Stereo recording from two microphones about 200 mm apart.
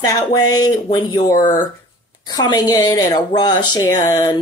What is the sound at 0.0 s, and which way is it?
Speech, 20° left (ahead or behind).